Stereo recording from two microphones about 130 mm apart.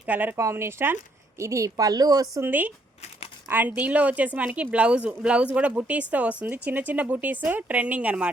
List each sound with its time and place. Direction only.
0.0 s a woman's voice: 15° right (ahead or behind); by 2.4 s 30° right (ahead or behind)
2.4 s a woman's voice: 15° right (ahead or behind)